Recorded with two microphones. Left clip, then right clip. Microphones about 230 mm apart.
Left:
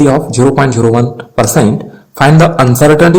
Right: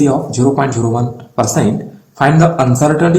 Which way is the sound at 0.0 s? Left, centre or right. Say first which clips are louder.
Left 5 dB; left.